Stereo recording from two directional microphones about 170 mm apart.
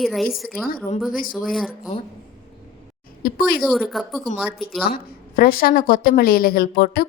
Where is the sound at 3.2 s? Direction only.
60° left (ahead or behind).